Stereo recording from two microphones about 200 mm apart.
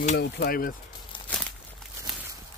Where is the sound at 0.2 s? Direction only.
50° left (ahead or behind).